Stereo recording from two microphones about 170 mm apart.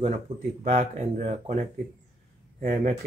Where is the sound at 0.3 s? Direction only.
30° right (ahead or behind).